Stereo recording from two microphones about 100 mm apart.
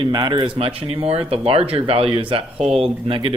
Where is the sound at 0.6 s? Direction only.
75° right (ahead or behind).